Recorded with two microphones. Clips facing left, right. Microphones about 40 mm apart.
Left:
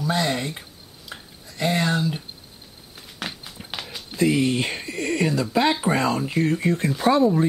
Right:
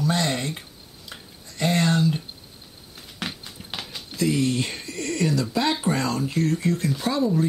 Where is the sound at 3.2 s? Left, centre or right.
Centre.